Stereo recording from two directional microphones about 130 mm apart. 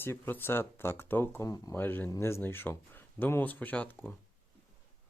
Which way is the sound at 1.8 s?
15° left (ahead or behind).